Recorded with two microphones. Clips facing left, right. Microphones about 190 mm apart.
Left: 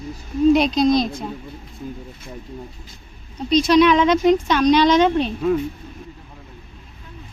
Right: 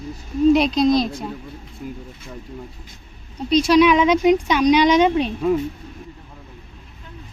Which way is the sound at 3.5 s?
10° right (ahead or behind).